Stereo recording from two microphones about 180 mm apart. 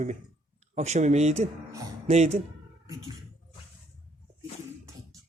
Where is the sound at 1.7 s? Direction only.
20° right (ahead or behind).